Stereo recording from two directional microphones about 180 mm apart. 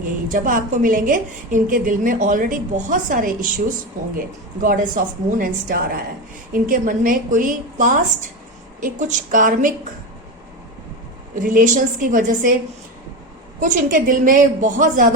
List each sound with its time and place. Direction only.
0.0 s a woman's voice: 50° right (ahead or behind)
11.3 s a woman's voice: 45° right (ahead or behind)
13.6 s a woman's voice: 45° right (ahead or behind)